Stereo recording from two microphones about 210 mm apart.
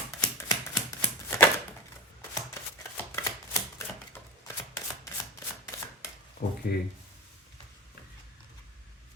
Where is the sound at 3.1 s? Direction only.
15° left (ahead or behind).